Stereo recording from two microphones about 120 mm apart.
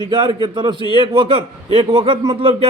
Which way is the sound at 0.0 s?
40° right (ahead or behind).